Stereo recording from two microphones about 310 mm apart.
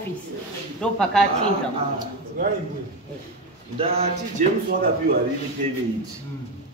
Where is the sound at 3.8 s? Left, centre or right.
Centre.